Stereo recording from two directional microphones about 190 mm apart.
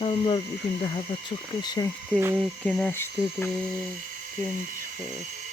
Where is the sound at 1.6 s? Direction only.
20° left (ahead or behind).